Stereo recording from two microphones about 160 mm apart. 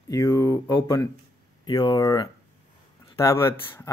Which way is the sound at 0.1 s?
20° left (ahead or behind).